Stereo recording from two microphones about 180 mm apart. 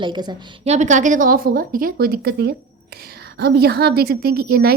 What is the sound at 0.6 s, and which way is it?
A woman's voice, 40° right (ahead or behind).